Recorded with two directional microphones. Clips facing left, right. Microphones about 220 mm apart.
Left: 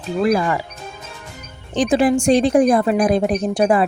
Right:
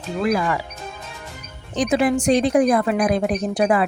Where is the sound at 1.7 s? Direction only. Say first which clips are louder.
Left 3 dB; 30° left (ahead or behind).